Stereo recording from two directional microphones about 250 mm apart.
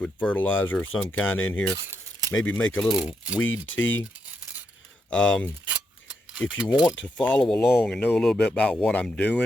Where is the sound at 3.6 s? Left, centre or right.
Left.